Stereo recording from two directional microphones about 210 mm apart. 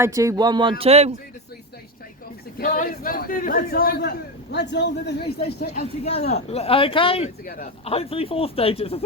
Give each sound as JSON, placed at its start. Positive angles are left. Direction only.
{"t": 0.0, "sound": "speech", "side_deg": -15}
{"t": 2.6, "sound": "a man's voice", "side_deg": 40}
{"t": 5.7, "sound": "speech", "side_deg": 30}
{"t": 7.4, "sound": "a man's voice", "side_deg": 45}
{"t": 7.9, "sound": "speech", "side_deg": 30}